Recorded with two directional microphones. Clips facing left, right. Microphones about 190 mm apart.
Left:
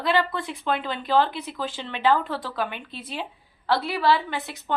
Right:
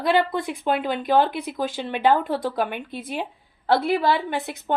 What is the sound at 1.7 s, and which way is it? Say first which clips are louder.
A woman's voice: right 2 dB; 50° right (ahead or behind).